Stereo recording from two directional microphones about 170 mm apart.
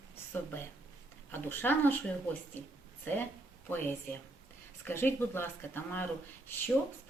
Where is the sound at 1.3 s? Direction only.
10° left (ahead or behind).